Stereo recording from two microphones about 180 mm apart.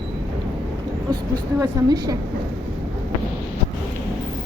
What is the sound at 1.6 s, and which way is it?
Speech, 20° right (ahead or behind).